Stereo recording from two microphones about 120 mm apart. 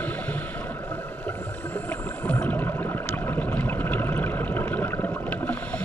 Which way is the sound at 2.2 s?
15° left (ahead or behind).